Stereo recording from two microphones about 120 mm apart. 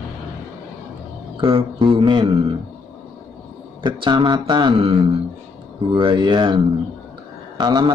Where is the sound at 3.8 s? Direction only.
40° right (ahead or behind).